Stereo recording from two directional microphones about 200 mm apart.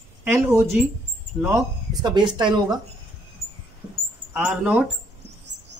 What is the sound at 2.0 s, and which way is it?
Speech, 20° right (ahead or behind).